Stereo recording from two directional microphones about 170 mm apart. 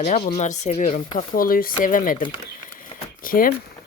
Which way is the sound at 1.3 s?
60° left (ahead or behind).